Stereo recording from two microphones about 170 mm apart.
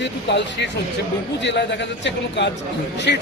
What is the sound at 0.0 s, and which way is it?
A man's voice, 90° left.